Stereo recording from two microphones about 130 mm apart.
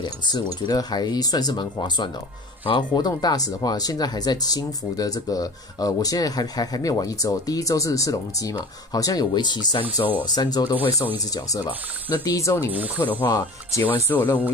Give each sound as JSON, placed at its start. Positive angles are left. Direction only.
{"t": 0.0, "sound": "speech", "side_deg": 35}
{"t": 13.2, "sound": "speech", "side_deg": 35}
{"t": 13.7, "sound": "speech", "side_deg": 25}